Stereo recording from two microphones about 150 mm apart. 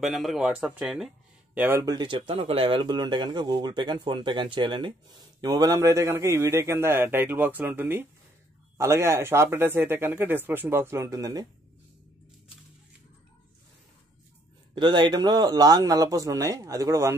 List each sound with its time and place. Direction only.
0.0 s speech: centre (ahead or behind); by 11.4 s 25° right (ahead or behind)
14.8 s speech: 30° right (ahead or behind)